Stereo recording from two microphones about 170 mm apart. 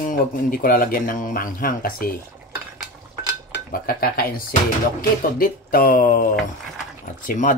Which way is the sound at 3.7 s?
60° left (ahead or behind).